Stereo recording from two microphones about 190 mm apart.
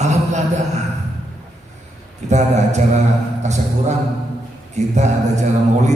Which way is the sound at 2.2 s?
35° right (ahead or behind).